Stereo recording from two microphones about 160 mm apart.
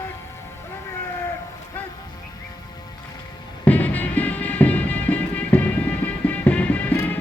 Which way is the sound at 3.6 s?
10° left (ahead or behind).